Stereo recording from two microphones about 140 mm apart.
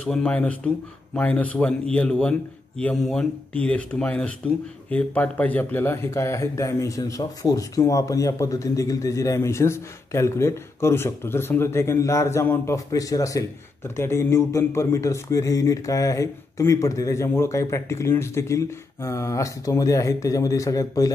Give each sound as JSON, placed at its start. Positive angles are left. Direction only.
{"t": 0.0, "sound": "speech", "side_deg": 10}